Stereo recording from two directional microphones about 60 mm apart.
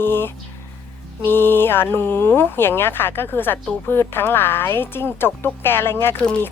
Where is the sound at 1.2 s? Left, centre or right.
Left.